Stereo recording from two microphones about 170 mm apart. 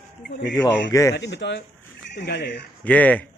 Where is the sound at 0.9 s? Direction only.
20° left (ahead or behind).